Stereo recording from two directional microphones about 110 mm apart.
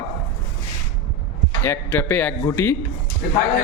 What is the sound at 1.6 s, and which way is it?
A man's voice, 20° left (ahead or behind).